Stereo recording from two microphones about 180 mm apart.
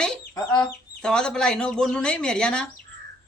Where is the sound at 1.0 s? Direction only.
5° left (ahead or behind).